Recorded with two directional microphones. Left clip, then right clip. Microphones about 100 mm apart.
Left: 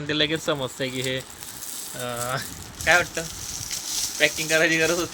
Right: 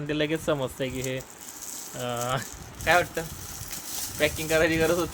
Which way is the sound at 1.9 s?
15° right (ahead or behind).